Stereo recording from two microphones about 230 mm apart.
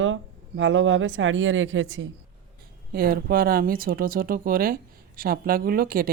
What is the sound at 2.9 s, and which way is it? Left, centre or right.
Speech, right.